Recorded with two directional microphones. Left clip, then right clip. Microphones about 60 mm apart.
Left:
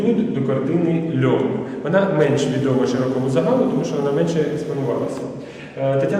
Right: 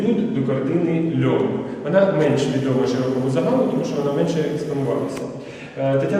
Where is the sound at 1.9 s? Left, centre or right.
Left.